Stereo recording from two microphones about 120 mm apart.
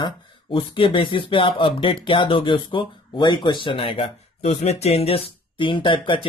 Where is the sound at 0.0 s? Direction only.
45° left (ahead or behind).